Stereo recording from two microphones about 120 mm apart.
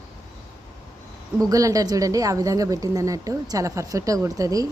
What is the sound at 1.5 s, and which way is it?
A woman's voice, 30° right (ahead or behind).